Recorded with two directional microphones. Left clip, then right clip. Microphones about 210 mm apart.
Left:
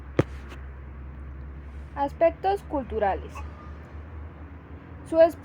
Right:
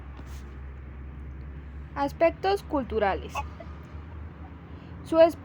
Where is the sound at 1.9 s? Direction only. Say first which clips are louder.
Left 1 dB; 15° right (ahead or behind).